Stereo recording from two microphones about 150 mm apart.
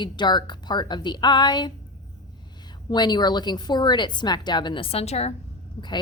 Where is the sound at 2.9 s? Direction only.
30° left (ahead or behind); by 5.3 s 45° left (ahead or behind).